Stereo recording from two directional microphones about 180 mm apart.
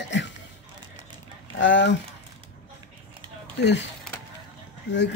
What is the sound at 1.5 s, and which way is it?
Speech, 90° left.